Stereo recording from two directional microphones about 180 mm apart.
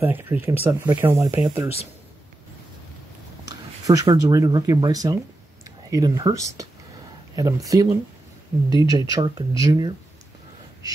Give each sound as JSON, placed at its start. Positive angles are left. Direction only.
{"t": 0.0, "sound": "speech", "side_deg": -10}
{"t": 3.8, "sound": "speech", "side_deg": -20}